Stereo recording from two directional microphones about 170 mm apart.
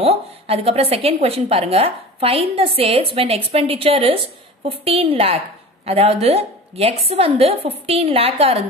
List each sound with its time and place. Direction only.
0.0 s a woman's voice: 35° right (ahead or behind)